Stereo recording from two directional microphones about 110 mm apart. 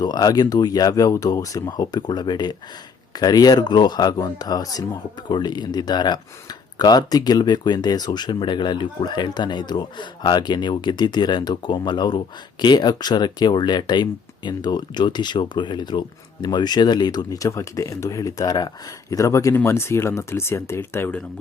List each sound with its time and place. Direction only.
0.0 s speech: 35° left (ahead or behind)